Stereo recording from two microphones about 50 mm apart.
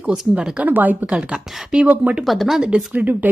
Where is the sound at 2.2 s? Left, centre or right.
Centre.